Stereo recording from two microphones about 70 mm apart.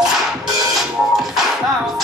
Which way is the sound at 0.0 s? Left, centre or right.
Centre.